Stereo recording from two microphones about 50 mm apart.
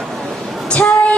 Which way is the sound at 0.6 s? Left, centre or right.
Left.